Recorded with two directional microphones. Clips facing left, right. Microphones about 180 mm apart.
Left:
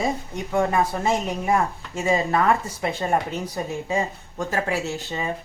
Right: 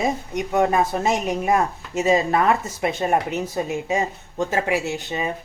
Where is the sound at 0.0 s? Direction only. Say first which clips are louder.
Right 3 dB; 20° right (ahead or behind).